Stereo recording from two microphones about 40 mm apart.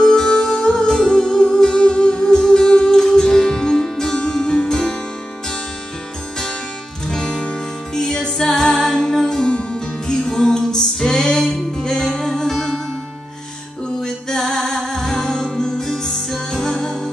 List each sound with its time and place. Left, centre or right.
0.0 s music: centre
7.1 s music: centre
12.1 s music: centre
14.0 s music: centre